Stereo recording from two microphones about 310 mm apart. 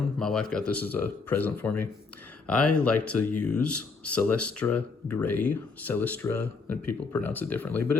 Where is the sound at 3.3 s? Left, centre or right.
Left.